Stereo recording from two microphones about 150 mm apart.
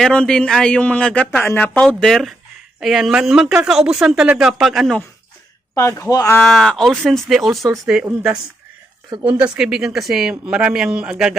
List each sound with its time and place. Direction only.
0.0 s a man's voice: 5° left (ahead or behind)
5.7 s speech: 20° left (ahead or behind)
6.3 s a man's voice: centre (ahead or behind)